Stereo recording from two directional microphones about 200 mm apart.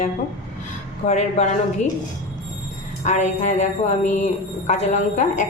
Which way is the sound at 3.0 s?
35° left (ahead or behind).